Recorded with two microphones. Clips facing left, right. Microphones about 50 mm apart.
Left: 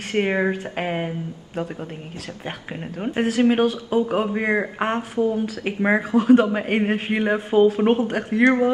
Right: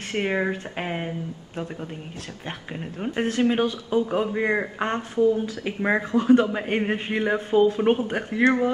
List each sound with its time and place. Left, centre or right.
0.1 s speech: left
0.4 s speech: centre
2.4 s speech: centre
5.4 s speech: left
5.8 s speech: centre
8.1 s speech: centre